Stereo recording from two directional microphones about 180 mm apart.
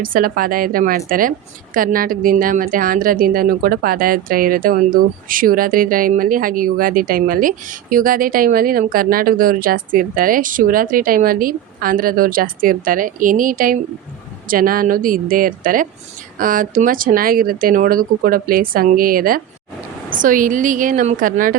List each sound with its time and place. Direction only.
0.0 s speech: 50° right (ahead or behind)